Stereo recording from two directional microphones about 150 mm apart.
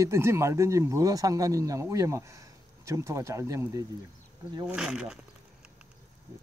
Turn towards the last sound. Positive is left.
turn(degrees=-5)  # may be behind; listen again after turning